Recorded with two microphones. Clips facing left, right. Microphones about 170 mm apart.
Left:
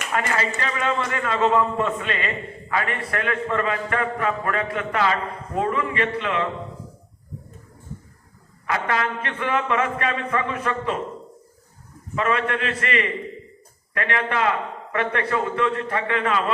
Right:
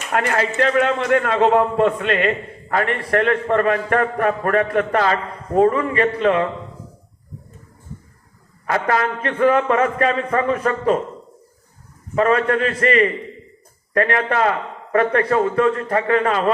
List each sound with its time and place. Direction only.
0.1 s a man's voice: 55° right (ahead or behind); by 6.5 s 35° right (ahead or behind)
8.6 s a man's voice: 40° right (ahead or behind)
12.1 s a man's voice: 40° right (ahead or behind)